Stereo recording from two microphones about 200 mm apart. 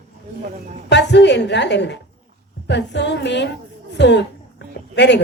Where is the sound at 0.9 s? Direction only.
60° left (ahead or behind).